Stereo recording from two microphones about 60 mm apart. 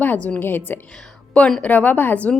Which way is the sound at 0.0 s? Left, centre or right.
Left.